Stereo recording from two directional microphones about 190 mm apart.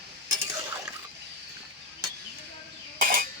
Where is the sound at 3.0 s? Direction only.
45° right (ahead or behind).